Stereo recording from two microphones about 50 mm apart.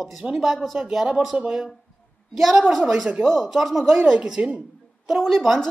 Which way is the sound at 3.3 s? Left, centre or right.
Centre.